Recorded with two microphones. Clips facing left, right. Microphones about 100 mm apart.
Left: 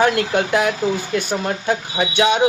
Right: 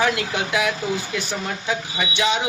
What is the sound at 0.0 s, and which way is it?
Speech, 50° left (ahead or behind).